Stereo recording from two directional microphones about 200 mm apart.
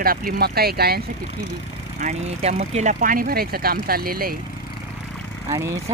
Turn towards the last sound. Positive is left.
turn(degrees=-15)  # may be behind; listen again after turning